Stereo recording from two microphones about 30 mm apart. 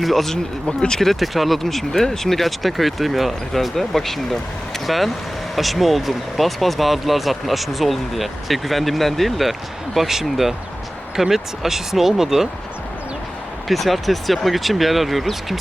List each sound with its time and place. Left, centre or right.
0.0 s speech: centre
0.7 s speech: left
1.1 s speech: centre
13.7 s speech: centre